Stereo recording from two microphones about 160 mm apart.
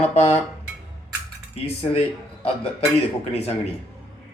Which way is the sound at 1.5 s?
40° left (ahead or behind).